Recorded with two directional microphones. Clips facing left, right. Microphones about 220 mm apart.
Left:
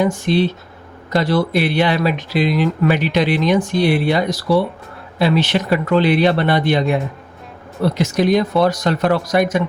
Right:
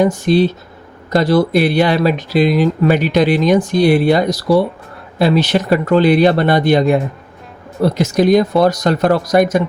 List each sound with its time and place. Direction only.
0.0 s speech: 40° right (ahead or behind)